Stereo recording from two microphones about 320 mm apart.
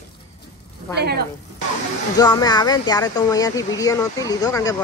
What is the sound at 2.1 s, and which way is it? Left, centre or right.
Speech, centre.